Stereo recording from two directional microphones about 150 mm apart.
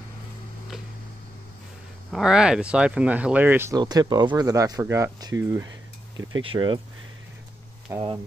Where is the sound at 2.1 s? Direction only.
5° right (ahead or behind).